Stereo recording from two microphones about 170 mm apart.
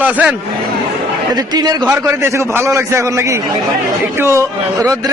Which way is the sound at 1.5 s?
25° right (ahead or behind).